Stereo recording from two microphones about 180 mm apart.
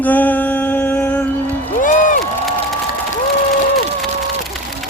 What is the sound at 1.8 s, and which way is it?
Music, 45° left (ahead or behind).